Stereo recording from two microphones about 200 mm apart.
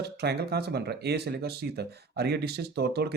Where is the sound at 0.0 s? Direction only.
55° right (ahead or behind).